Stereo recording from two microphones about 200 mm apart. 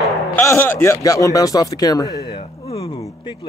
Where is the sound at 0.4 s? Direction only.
10° left (ahead or behind).